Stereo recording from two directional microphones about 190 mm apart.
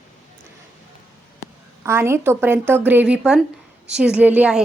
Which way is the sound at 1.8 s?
15° right (ahead or behind).